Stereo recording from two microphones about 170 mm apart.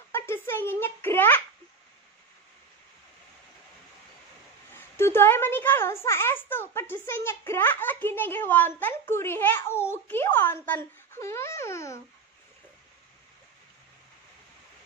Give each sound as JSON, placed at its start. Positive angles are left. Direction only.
{"t": 0.1, "sound": "a sound", "side_deg": 15}
{"t": 4.7, "sound": "a child's voice", "side_deg": 15}
{"t": 10.7, "sound": "babbling", "side_deg": 15}